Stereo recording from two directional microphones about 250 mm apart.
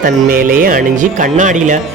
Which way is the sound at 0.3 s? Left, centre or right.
Right.